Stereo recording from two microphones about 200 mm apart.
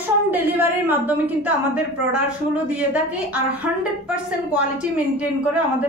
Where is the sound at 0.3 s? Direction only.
10° right (ahead or behind).